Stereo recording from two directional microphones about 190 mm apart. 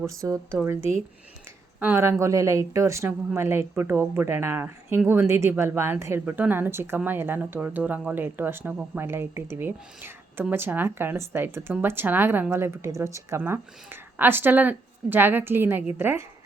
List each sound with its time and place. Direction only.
0.1 s a woman's voice: 15° right (ahead or behind)
1.8 s a woman's voice: 10° right (ahead or behind)